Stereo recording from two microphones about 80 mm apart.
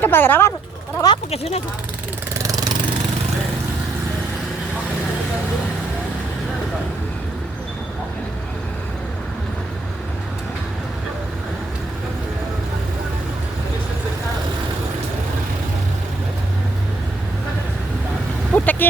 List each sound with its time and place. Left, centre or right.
0.0 s speech: left
1.0 s speech: left
2.4 s vehicle: right
18.5 s vehicle: left